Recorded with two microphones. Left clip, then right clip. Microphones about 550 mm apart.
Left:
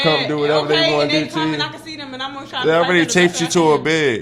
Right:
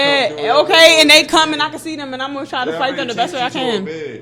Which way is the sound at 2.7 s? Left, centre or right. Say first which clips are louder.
Left 9 dB; left.